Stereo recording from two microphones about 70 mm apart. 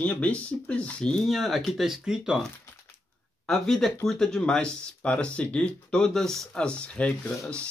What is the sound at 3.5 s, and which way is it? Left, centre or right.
Speech, centre.